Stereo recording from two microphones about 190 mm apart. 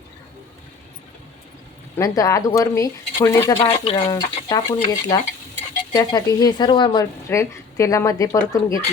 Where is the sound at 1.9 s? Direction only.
15° left (ahead or behind).